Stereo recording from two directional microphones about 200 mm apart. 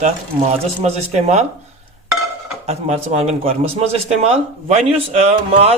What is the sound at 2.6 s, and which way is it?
Speech, 30° right (ahead or behind).